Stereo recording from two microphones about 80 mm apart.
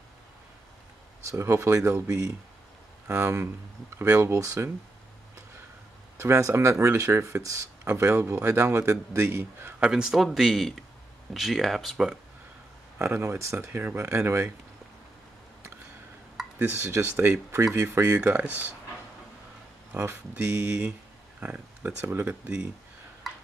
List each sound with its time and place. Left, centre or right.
1.2 s speech: right
6.1 s speech: right
9.8 s speech: centre
13.0 s speech: right
16.7 s speech: right
18.0 s speech: centre
19.9 s speech: right